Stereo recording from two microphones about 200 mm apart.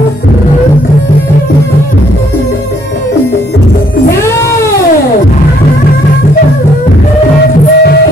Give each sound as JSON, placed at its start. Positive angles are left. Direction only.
{"t": 7.7, "sound": "music", "side_deg": 55}